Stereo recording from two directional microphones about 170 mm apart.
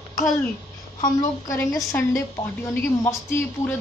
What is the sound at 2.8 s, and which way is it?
Speech, 15° left (ahead or behind).